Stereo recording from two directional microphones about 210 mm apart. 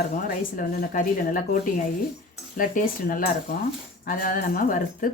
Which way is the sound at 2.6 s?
40° left (ahead or behind).